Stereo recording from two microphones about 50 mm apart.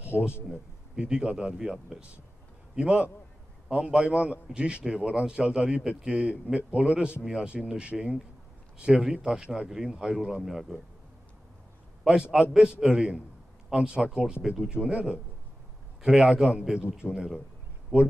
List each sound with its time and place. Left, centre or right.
0.1 s speech: centre
0.5 s speech: centre
2.7 s a man's voice: right; by 10.8 s centre
12.1 s a man's voice: centre
17.9 s a man's voice: right